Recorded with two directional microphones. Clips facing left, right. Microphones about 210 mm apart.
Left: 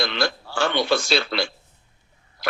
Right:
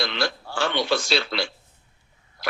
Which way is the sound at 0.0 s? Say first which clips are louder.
Left 2 dB; 50° left (ahead or behind).